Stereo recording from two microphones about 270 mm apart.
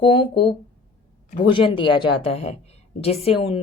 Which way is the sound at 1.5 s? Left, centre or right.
Centre.